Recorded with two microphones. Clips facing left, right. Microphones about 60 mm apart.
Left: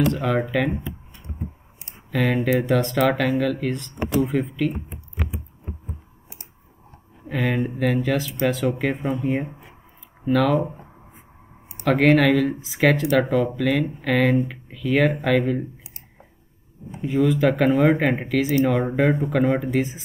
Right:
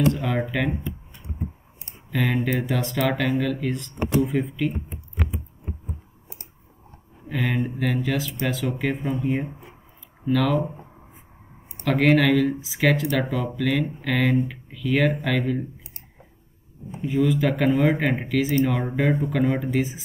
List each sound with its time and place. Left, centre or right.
0.2 s speech: centre
2.1 s speech: centre
7.2 s speech: centre
11.8 s speech: centre
17.1 s speech: centre